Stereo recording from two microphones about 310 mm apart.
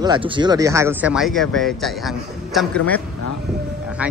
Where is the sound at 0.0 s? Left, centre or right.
Centre.